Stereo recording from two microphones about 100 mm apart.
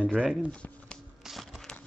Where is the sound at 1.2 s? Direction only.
Centre (ahead or behind).